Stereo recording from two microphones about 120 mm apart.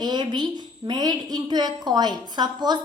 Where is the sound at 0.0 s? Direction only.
35° right (ahead or behind).